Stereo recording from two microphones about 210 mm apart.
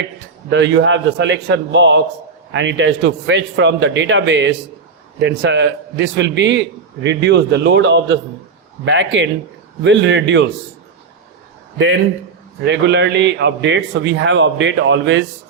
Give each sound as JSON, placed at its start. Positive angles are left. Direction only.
{"t": 0.5, "sound": "a man's voice", "side_deg": -60}
{"t": 12.6, "sound": "a man's voice", "side_deg": -55}